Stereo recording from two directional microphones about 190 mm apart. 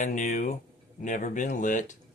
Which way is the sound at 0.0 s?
40° left (ahead or behind).